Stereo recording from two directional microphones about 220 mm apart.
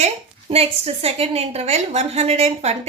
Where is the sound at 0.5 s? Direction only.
25° right (ahead or behind).